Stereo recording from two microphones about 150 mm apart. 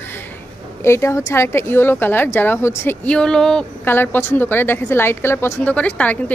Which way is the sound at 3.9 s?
15° left (ahead or behind).